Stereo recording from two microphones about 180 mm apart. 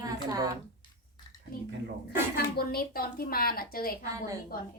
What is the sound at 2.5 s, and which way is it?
A woman's voice, 55° left (ahead or behind).